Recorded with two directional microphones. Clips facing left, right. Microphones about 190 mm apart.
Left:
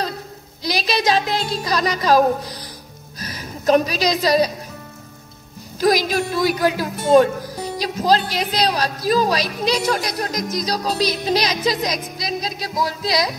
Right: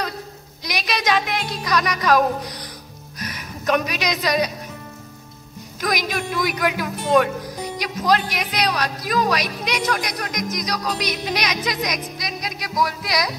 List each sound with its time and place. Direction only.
0.7 s music: 30° left (ahead or behind)
3.2 s a woman's voice: 30° left (ahead or behind)
5.8 s speech: 30° left (ahead or behind)